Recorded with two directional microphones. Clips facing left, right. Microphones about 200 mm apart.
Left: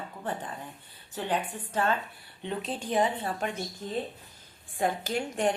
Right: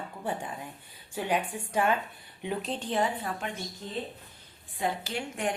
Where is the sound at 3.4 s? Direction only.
45° left (ahead or behind).